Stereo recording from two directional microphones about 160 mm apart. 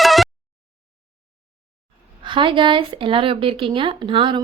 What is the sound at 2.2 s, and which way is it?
Speech, 30° right (ahead or behind).